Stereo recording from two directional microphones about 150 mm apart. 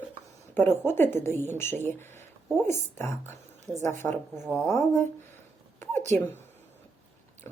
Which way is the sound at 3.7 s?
20° right (ahead or behind).